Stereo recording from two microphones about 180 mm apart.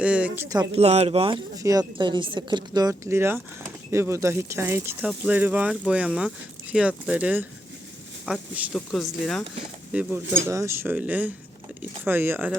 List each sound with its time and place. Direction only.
0.0 s a sound: 5° right (ahead or behind)
0.4 s speech: 20° right (ahead or behind)
0.7 s speech: 35° right (ahead or behind)
1.5 s speech: 20° right (ahead or behind)